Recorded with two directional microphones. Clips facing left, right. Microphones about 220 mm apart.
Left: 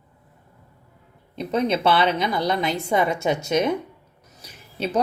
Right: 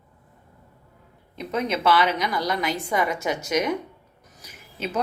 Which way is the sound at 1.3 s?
30° left (ahead or behind).